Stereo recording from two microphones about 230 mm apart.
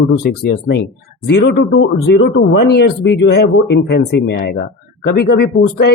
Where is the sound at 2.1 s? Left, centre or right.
Left.